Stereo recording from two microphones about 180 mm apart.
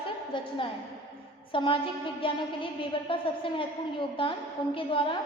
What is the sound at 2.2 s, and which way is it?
A woman's voice, 30° left (ahead or behind).